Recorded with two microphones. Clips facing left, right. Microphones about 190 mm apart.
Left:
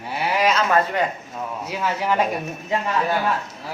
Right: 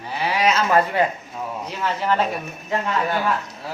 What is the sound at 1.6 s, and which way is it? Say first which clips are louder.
Speech: even; 10° left (ahead or behind).